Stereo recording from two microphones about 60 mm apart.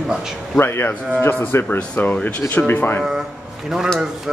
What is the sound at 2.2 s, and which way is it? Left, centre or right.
Speech, left.